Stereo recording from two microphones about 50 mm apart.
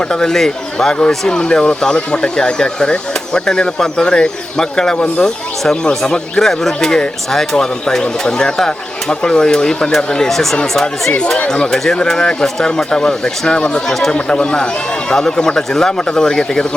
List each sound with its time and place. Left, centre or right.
0.1 s speech: centre
11.4 s speech: centre